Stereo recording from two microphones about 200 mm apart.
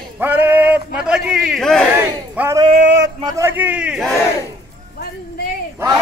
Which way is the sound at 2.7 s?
50° right (ahead or behind).